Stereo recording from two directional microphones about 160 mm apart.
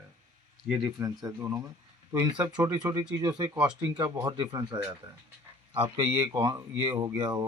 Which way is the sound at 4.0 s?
25° right (ahead or behind).